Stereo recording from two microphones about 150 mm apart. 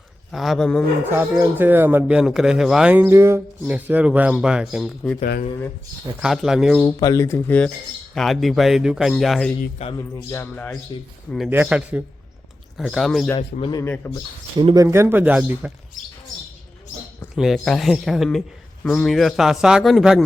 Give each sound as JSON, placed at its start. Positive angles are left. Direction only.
{"t": 0.3, "sound": "speech", "side_deg": 0}
{"t": 1.1, "sound": "speech", "side_deg": -15}
{"t": 6.1, "sound": "speech", "side_deg": -5}
{"t": 6.8, "sound": "speech", "side_deg": 25}
{"t": 9.8, "sound": "speech", "side_deg": 45}
{"t": 10.3, "sound": "speech", "side_deg": 10}
{"t": 11.4, "sound": "speech", "side_deg": -10}
{"t": 12.7, "sound": "speech", "side_deg": 0}
{"t": 13.6, "sound": "speech", "side_deg": 30}
{"t": 13.8, "sound": "speech", "side_deg": 15}
{"t": 14.8, "sound": "speech", "side_deg": -20}
{"t": 17.3, "sound": "speech", "side_deg": 0}